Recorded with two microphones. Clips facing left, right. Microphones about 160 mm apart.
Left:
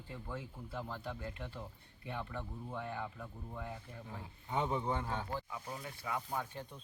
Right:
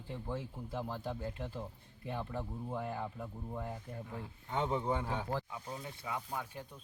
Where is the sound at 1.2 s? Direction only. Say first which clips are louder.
Right 4 dB; 15° right (ahead or behind).